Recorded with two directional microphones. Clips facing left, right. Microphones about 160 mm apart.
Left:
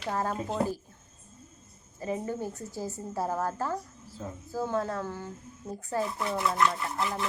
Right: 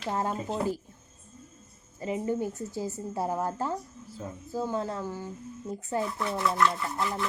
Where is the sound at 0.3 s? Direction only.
Centre (ahead or behind).